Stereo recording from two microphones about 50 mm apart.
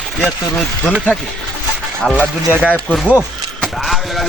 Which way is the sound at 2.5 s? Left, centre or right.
Right.